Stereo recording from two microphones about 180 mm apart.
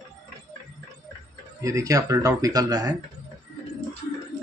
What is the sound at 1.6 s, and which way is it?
Speech, 20° right (ahead or behind).